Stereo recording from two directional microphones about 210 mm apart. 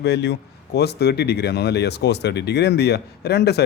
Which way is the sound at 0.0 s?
55° left (ahead or behind).